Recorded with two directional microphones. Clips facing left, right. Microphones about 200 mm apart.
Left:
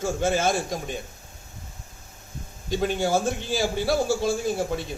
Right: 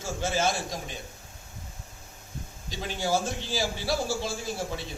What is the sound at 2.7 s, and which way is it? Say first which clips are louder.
A man's voice: left 6 dB; 55° left (ahead or behind).